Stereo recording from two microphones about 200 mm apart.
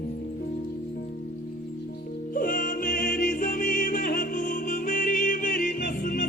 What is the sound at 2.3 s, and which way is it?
Music, 45° left (ahead or behind).